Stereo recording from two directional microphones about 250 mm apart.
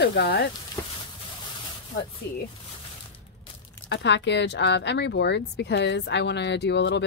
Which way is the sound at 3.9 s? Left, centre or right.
Left.